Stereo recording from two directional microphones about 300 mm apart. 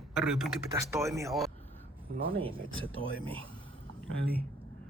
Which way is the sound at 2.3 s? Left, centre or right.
Centre.